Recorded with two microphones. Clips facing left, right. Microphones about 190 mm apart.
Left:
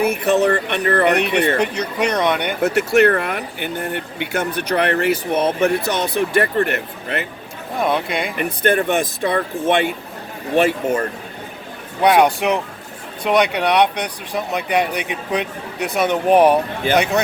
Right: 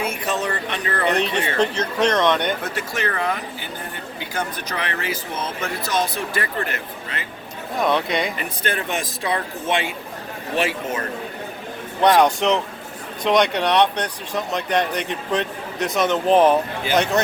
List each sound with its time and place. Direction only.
0.0 s speech: 65° left (ahead or behind)
1.5 s speech: 15° left (ahead or behind)
2.6 s speech: 70° left (ahead or behind)
7.8 s speech: 5° left (ahead or behind)
8.4 s a man's voice: 55° left (ahead or behind)
12.0 s speech: 10° left (ahead or behind)